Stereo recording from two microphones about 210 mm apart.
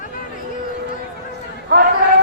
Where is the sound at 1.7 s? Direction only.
55° right (ahead or behind).